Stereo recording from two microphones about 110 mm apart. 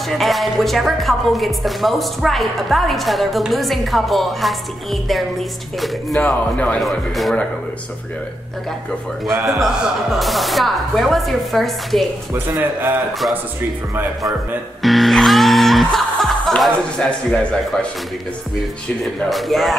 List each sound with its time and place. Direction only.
0.1 s speech: centre (ahead or behind)
6.1 s speech: 10° left (ahead or behind)
6.8 s speech: centre (ahead or behind)
9.3 s speech: 30° right (ahead or behind)
10.1 s speech: centre (ahead or behind)
12.5 s speech: 20° right (ahead or behind)
14.8 s music: centre (ahead or behind)
19.2 s speech: centre (ahead or behind)